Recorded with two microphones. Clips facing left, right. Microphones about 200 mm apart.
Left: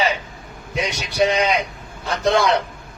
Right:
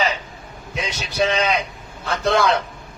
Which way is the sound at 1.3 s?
15° left (ahead or behind).